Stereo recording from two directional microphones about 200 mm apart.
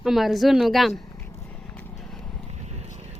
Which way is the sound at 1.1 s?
15° left (ahead or behind).